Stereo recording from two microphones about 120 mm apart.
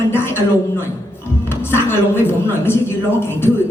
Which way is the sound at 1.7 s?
20° left (ahead or behind).